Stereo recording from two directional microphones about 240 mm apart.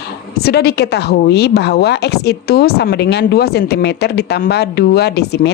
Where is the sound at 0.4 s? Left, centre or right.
Left.